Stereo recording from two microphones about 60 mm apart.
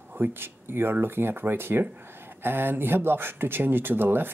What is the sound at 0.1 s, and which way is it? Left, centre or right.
Speech, right.